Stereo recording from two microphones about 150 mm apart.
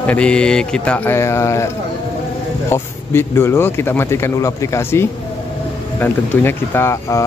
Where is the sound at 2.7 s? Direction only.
15° left (ahead or behind).